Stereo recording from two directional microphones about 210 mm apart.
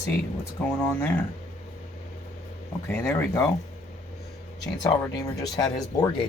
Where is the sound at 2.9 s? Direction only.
10° left (ahead or behind).